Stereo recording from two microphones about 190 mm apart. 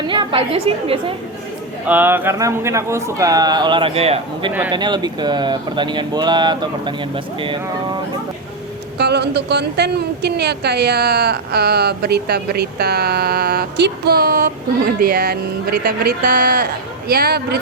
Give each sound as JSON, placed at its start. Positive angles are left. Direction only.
{"t": 0.1, "sound": "speech", "side_deg": -25}
{"t": 1.9, "sound": "a man's voice", "side_deg": -10}
{"t": 9.0, "sound": "a woman's voice", "side_deg": -60}